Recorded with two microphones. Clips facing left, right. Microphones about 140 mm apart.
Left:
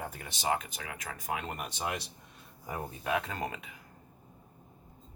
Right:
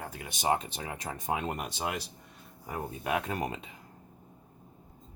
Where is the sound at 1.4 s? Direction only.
15° right (ahead or behind).